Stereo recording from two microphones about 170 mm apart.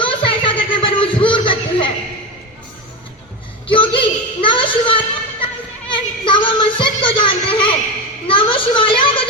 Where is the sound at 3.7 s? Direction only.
30° left (ahead or behind).